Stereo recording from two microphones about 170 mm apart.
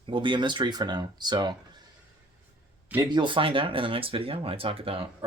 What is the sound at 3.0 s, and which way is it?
Speech, 25° right (ahead or behind).